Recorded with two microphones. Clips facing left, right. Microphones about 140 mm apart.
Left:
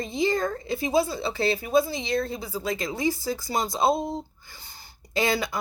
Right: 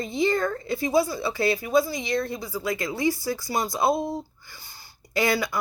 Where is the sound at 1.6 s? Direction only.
55° left (ahead or behind).